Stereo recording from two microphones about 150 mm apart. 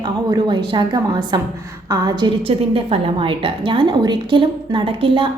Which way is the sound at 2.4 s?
40° right (ahead or behind).